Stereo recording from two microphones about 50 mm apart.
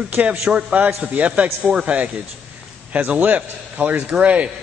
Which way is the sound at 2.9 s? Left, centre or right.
Right.